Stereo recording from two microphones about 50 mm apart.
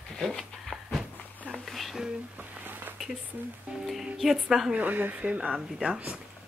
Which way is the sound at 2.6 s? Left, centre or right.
Right.